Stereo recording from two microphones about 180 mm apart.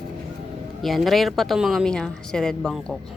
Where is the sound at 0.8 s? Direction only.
Centre (ahead or behind).